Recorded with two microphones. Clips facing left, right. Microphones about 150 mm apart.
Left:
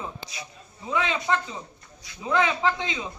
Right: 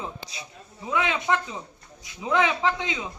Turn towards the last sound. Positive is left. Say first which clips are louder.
# even
turn(degrees=-10)  # may be behind; listen again after turning